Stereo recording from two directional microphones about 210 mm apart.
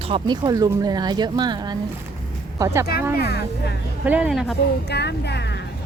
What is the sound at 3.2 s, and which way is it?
Speech, 50° left (ahead or behind).